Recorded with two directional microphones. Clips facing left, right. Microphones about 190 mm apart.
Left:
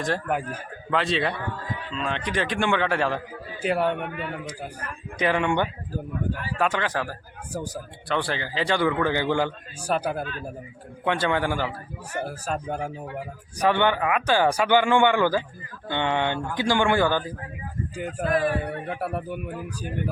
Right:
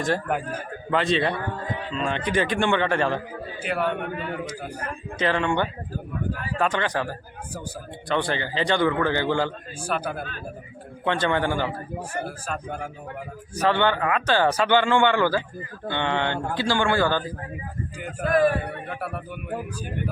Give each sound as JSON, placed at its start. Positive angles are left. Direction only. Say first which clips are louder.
{"t": 0.9, "sound": "speech", "louder": "right 2 dB", "side_deg": 0}
{"t": 3.6, "sound": "speech", "louder": "left 3 dB", "side_deg": 35}
{"t": 5.2, "sound": "speech", "louder": "even", "side_deg": 15}
{"t": 9.8, "sound": "speech", "louder": "left 3 dB", "side_deg": 40}
{"t": 11.0, "sound": "speech", "louder": "right 1 dB", "side_deg": 10}
{"t": 12.5, "sound": "speech", "louder": "left 3 dB", "side_deg": 40}
{"t": 13.6, "sound": "speech", "louder": "even", "side_deg": 15}
{"t": 18.2, "sound": "music", "louder": "right 4 dB", "side_deg": -45}
{"t": 18.9, "sound": "speech", "louder": "left 3 dB", "side_deg": 35}